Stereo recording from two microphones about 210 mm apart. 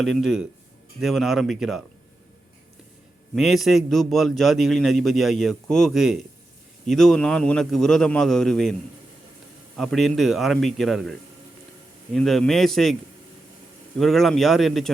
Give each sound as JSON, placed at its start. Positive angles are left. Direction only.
{"t": 0.0, "sound": "a man's voice", "side_deg": 0}
{"t": 3.3, "sound": "a man's voice", "side_deg": 0}
{"t": 9.7, "sound": "a man's voice", "side_deg": 0}
{"t": 12.1, "sound": "a man's voice", "side_deg": 0}
{"t": 14.0, "sound": "a man's voice", "side_deg": 0}